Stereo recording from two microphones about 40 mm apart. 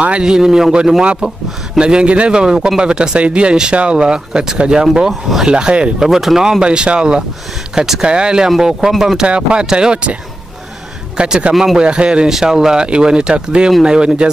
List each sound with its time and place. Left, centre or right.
0.2 s speech: centre
1.2 s speech: right
2.4 s speech: centre
6.0 s speech: centre
6.6 s speech: right
8.5 s speech: centre
9.3 s speech: right
11.1 s speech: centre
11.8 s speech: right
12.3 s speech: centre